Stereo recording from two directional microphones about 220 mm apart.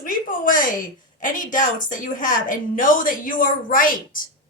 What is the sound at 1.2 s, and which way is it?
A woman's voice, 35° left (ahead or behind).